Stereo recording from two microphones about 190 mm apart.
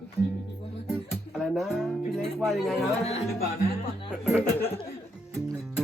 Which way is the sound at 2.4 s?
Centre (ahead or behind).